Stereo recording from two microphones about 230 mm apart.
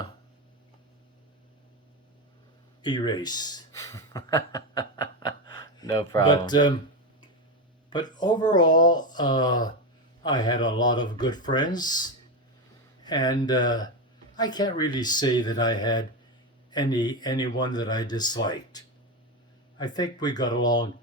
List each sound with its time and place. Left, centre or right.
2.8 s speech: centre
7.9 s speech: centre